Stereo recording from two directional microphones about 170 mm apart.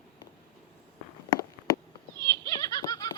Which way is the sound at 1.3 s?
25° left (ahead or behind).